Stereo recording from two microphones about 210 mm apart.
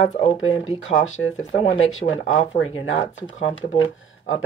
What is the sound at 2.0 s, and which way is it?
Speech, 25° left (ahead or behind).